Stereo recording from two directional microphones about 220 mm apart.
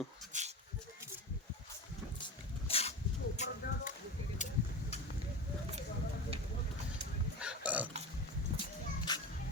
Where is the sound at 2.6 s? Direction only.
25° left (ahead or behind).